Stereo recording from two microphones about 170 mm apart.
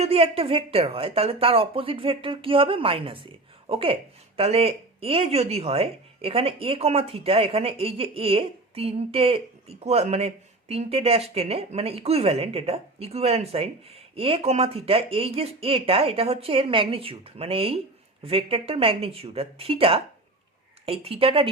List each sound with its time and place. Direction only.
0.0 s speech: 35° right (ahead or behind)